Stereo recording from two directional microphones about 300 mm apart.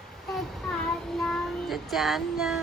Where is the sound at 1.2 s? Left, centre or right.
Centre.